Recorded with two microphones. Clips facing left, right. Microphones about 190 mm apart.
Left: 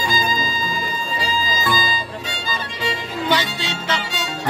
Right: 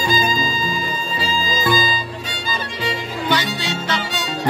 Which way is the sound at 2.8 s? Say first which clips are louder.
Left 1 dB; 25° left (ahead or behind).